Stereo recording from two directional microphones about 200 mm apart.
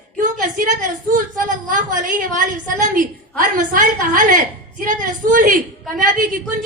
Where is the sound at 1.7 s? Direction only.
40° right (ahead or behind).